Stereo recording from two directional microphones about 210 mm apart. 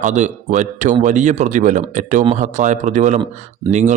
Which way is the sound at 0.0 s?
35° right (ahead or behind).